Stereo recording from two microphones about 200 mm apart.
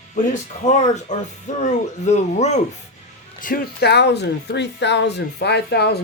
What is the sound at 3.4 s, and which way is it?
Speech, 50° left (ahead or behind).